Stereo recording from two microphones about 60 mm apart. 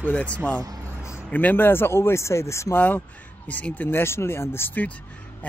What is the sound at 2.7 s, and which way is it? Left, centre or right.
Speech, left.